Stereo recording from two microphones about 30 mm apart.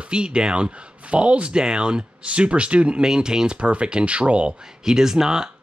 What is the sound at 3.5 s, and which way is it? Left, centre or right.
Speech, right.